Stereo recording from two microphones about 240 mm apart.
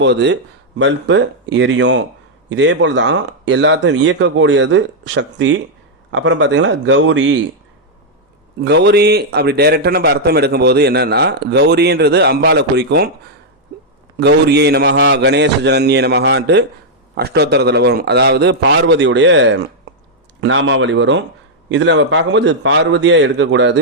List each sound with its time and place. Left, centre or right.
0.0 s a man's voice: right
8.6 s a man's voice: right
14.2 s a man's voice: right